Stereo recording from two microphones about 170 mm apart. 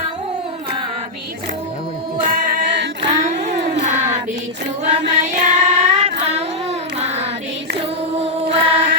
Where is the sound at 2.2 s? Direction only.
50° right (ahead or behind).